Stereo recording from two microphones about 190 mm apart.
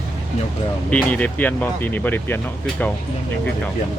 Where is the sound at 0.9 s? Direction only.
5° left (ahead or behind).